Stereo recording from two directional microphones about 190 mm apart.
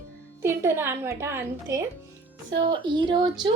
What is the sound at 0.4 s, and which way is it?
A woman's voice, 10° right (ahead or behind).